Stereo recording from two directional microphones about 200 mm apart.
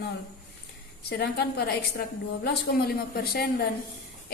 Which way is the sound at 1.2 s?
55° left (ahead or behind).